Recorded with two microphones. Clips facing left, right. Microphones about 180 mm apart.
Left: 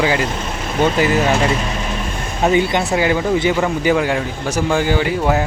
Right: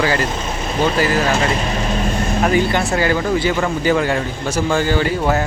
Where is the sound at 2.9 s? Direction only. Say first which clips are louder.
Left 1 dB; 15° left (ahead or behind).